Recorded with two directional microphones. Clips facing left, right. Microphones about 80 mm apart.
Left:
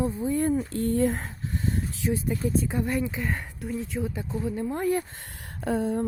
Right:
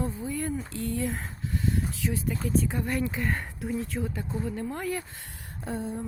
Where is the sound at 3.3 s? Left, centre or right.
Centre.